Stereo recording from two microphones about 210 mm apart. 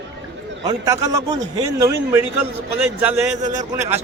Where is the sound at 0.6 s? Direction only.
15° right (ahead or behind).